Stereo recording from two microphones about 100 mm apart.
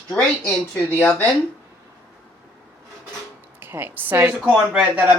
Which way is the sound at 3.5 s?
20° right (ahead or behind).